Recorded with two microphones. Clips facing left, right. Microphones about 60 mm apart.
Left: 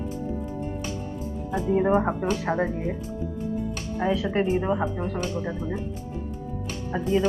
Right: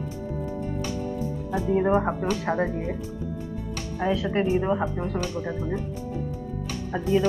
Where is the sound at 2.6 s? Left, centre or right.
Centre.